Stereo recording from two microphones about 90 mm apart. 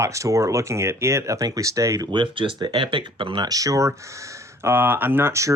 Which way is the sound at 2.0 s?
65° right (ahead or behind).